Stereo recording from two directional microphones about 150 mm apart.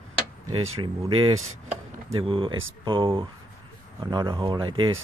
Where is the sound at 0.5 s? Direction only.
35° right (ahead or behind).